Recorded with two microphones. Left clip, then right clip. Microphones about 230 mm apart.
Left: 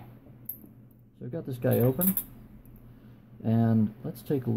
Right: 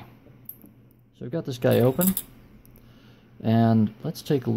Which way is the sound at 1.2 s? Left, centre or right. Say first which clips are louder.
Right 6 dB; right.